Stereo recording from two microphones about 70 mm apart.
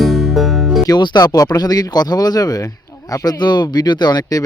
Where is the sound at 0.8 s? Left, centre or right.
Left.